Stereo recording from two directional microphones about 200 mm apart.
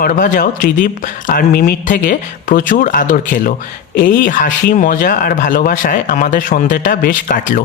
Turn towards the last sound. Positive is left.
turn(degrees=45)  # may be behind; listen again after turning